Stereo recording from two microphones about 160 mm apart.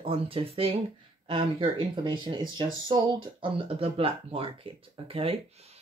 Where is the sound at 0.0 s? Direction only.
35° right (ahead or behind).